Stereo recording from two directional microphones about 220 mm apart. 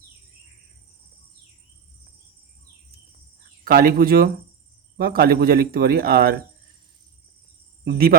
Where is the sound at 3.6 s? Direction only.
40° right (ahead or behind).